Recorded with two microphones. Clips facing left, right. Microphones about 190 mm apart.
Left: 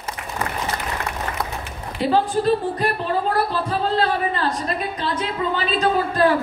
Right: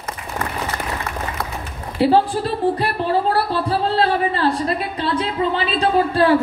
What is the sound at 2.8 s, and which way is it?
A woman's voice, 35° right (ahead or behind).